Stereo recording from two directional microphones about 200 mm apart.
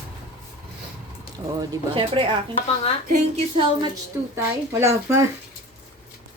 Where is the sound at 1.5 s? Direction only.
20° right (ahead or behind).